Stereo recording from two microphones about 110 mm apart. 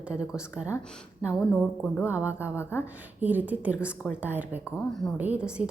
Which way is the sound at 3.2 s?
15° right (ahead or behind).